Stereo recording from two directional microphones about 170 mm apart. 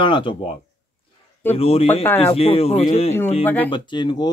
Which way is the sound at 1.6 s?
35° left (ahead or behind).